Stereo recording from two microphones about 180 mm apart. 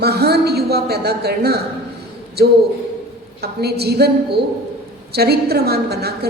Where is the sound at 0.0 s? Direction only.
65° right (ahead or behind).